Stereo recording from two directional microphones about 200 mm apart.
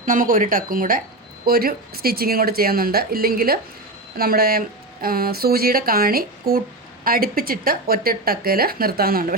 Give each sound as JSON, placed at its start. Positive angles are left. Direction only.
{"t": 0.0, "sound": "speech", "side_deg": -45}